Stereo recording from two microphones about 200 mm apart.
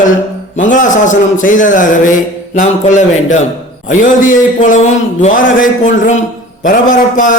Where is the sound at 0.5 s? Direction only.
40° left (ahead or behind).